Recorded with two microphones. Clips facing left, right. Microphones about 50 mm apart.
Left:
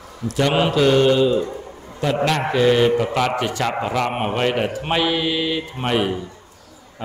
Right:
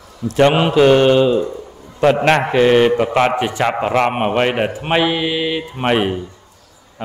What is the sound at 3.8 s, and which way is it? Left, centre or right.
A man's voice, right.